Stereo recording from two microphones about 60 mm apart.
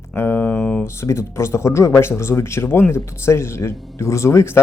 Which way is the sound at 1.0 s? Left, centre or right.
Left.